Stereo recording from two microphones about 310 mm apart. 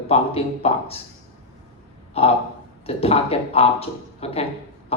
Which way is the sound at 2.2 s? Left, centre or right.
Centre.